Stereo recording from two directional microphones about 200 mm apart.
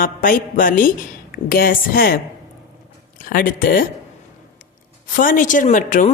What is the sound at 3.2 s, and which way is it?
Speech, 45° left (ahead or behind).